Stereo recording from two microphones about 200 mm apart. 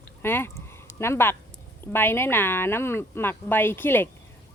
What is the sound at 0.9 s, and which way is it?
Speech, 10° left (ahead or behind).